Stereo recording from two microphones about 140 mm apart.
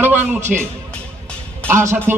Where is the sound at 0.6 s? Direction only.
10° left (ahead or behind).